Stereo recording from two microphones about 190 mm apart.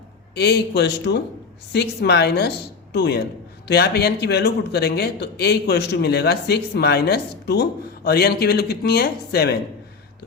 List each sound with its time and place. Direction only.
0.3 s a man's voice: 60° left (ahead or behind)